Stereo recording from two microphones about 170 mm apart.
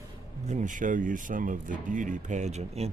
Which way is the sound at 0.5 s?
45° right (ahead or behind).